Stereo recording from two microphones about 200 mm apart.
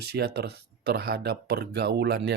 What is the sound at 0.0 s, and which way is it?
Speech, 55° right (ahead or behind).